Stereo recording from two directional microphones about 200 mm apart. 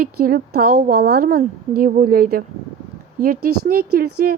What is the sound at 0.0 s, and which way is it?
A woman's voice, 50° right (ahead or behind).